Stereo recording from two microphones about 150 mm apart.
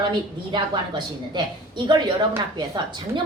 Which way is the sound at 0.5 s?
30° right (ahead or behind).